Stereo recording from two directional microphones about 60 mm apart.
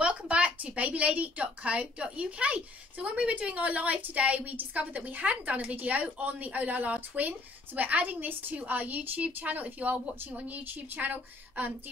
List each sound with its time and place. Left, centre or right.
0.0 s a woman's voice: centre